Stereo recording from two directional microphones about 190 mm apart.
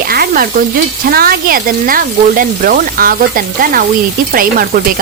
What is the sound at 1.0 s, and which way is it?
Speech, 50° right (ahead or behind).